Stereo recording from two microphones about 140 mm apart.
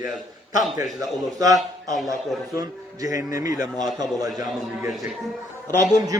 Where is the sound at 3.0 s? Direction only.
25° right (ahead or behind).